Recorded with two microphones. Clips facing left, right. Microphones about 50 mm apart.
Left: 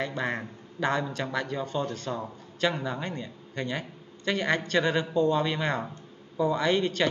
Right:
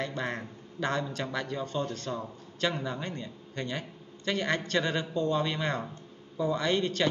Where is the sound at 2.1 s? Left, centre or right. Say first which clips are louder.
Left 2 dB; left.